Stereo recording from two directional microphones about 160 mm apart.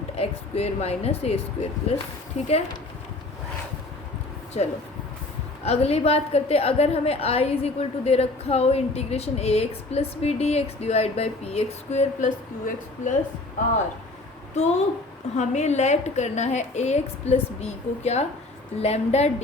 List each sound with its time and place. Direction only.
0.2 s a woman's voice: 40° left (ahead or behind)
4.6 s a woman's voice: 45° left (ahead or behind)
14.5 s a woman's voice: 45° left (ahead or behind)